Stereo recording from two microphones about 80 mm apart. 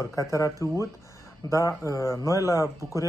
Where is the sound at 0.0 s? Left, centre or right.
Left.